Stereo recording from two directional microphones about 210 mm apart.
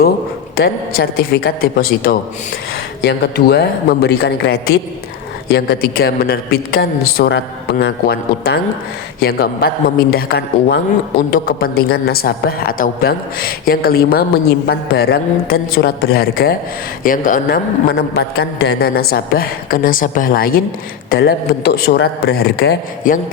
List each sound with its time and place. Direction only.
0.5 s a man's voice: 50° left (ahead or behind)